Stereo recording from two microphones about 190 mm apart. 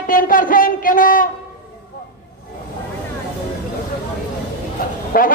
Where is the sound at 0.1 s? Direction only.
45° left (ahead or behind).